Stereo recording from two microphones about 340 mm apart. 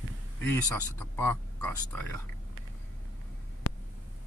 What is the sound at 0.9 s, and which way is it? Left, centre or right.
Speech, centre.